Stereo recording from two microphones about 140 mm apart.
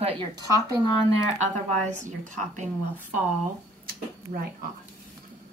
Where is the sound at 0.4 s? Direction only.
30° right (ahead or behind).